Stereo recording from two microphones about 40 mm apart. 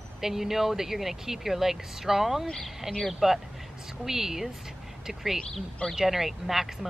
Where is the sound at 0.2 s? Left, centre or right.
Centre.